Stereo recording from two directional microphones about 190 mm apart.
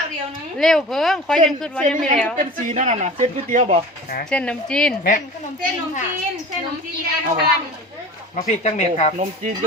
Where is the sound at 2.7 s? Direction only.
40° right (ahead or behind).